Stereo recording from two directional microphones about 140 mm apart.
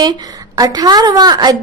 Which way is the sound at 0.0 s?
30° right (ahead or behind).